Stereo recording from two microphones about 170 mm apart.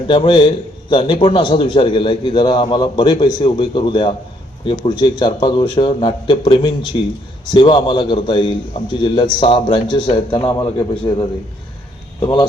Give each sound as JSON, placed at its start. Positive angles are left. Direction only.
{"t": 0.1, "sound": "a man's voice", "side_deg": 30}
{"t": 6.9, "sound": "speech", "side_deg": 40}
{"t": 7.5, "sound": "a man's voice", "side_deg": 25}